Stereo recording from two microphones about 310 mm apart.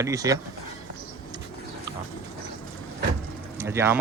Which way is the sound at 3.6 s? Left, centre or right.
Centre.